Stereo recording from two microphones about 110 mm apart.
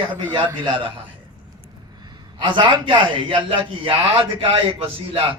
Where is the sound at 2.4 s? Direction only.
50° right (ahead or behind).